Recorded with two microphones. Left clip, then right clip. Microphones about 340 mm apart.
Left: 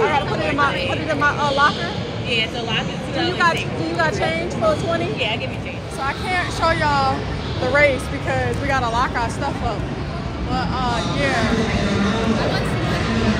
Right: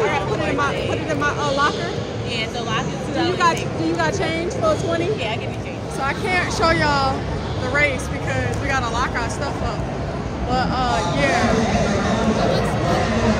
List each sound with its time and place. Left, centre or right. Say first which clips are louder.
0.0 s vehicle: left 2 dB; centre
3.3 s speech: left 1 dB; centre
6.0 s speech: right 1 dB; centre
10.5 s speech: right 2 dB; centre